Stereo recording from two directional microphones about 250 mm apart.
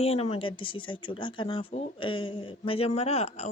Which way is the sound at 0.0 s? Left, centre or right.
Left.